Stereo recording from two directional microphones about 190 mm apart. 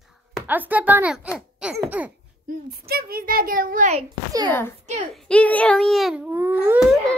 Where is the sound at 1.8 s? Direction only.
10° right (ahead or behind).